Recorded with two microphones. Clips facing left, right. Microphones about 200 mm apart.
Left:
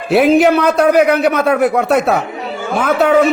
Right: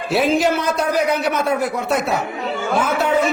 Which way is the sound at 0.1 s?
60° left (ahead or behind).